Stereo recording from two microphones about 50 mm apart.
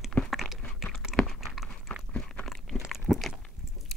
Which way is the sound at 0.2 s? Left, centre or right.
Centre.